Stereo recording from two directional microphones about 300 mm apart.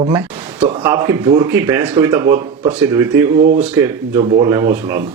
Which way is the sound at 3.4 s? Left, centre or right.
Right.